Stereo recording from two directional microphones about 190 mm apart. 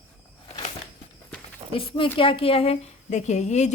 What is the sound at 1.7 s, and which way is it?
A woman's voice, 30° left (ahead or behind).